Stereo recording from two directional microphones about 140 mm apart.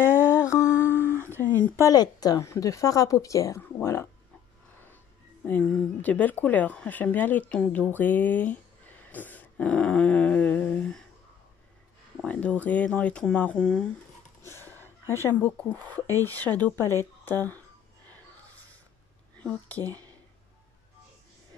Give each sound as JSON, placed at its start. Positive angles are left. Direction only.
{"t": 0.0, "sound": "music", "side_deg": 15}
{"t": 0.8, "sound": "a sound", "side_deg": -15}
{"t": 1.3, "sound": "a sound", "side_deg": 15}
{"t": 1.9, "sound": "a woman's voice", "side_deg": 25}
{"t": 12.3, "sound": "speech", "side_deg": 10}
{"t": 14.4, "sound": "speech", "side_deg": 15}
{"t": 19.3, "sound": "speech", "side_deg": 10}